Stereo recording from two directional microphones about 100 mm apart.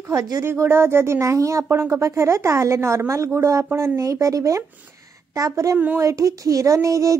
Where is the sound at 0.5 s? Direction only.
25° right (ahead or behind).